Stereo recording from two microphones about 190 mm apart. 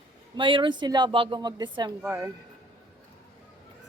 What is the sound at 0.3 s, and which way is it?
A woman's voice, 25° right (ahead or behind).